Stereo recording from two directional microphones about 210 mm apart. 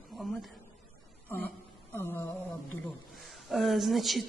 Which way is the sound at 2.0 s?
10° left (ahead or behind).